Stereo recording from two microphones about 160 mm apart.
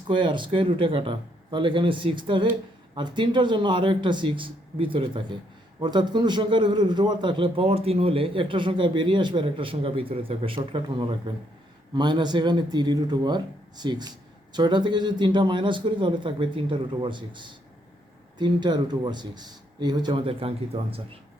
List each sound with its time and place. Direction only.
0.1 s a man's voice: 30° right (ahead or behind)